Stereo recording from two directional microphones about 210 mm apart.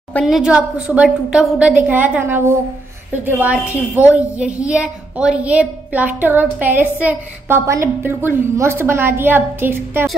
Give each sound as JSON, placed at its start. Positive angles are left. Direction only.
{"t": 0.1, "sound": "a woman's voice", "side_deg": 0}